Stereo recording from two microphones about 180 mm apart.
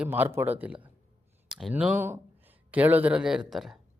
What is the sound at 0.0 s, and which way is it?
A man's voice, 10° right (ahead or behind).